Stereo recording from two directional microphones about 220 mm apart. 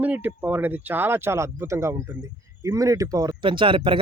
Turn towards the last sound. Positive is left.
turn(degrees=-25)  # may be behind; listen again after turning